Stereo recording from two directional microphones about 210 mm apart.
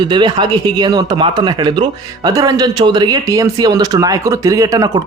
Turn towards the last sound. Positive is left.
turn(degrees=-15)  # may be behind; listen again after turning